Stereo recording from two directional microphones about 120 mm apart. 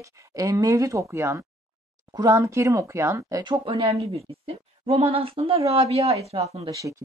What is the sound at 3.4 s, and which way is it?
Speech, 45° right (ahead or behind).